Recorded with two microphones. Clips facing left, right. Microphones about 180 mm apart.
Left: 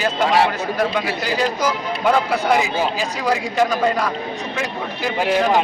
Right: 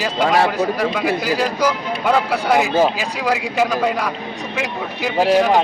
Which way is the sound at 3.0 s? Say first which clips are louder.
Even; 5° right (ahead or behind).